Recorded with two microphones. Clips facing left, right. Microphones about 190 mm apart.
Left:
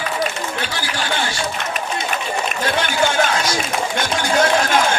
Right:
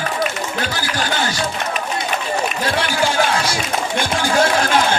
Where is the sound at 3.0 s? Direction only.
30° right (ahead or behind).